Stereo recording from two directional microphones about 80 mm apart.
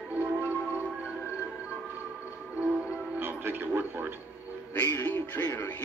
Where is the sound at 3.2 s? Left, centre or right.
Right.